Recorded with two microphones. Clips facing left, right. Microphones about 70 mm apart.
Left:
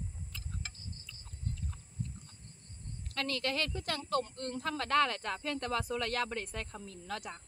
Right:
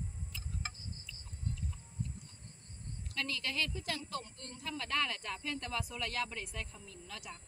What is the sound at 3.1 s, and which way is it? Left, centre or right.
A woman's voice, left.